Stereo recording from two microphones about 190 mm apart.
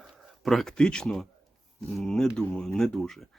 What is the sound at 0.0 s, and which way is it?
Speech, centre (ahead or behind).